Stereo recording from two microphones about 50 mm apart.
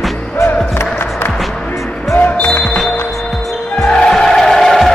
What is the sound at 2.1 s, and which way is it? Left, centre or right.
Music, left.